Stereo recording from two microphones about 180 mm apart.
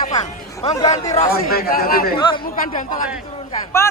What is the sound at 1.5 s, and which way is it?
Speech, 55° left (ahead or behind).